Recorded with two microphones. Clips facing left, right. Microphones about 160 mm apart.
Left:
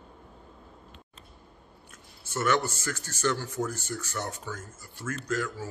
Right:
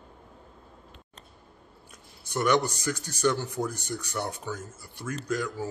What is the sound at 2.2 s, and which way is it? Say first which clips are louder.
Speech: right 2 dB; 15° right (ahead or behind).